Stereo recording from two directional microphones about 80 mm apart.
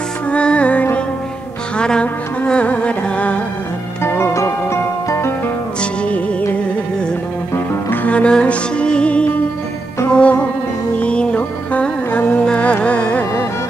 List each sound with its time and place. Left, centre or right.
0.3 s music: centre
4.0 s music: left
5.8 s music: centre
7.5 s music: left